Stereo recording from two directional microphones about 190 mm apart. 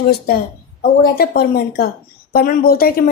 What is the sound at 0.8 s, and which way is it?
Speech, 50° left (ahead or behind).